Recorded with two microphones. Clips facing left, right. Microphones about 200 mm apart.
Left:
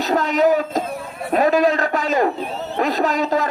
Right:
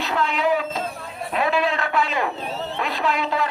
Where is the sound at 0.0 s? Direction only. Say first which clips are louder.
Left 6 dB; 40° left (ahead or behind).